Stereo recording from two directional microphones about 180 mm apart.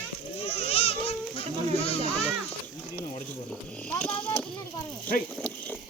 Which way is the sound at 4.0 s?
5° left (ahead or behind).